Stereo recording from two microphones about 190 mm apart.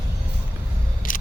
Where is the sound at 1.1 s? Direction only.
45° left (ahead or behind).